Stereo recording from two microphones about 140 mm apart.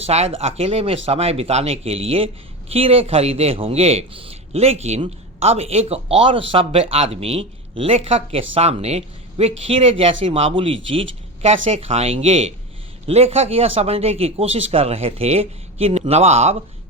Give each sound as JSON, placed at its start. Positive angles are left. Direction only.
{"t": 0.0, "sound": "speech", "side_deg": -45}